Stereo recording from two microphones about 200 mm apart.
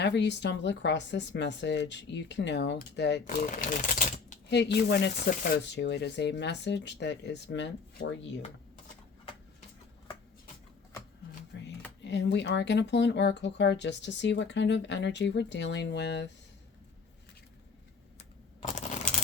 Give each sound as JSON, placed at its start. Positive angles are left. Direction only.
{"t": 0.0, "sound": "speech", "side_deg": 60}
{"t": 3.2, "sound": "speech", "side_deg": 40}
{"t": 4.4, "sound": "speech", "side_deg": 60}
{"t": 11.5, "sound": "a sound", "side_deg": 65}
{"t": 12.0, "sound": "speech", "side_deg": 60}
{"t": 18.6, "sound": "a sound", "side_deg": 35}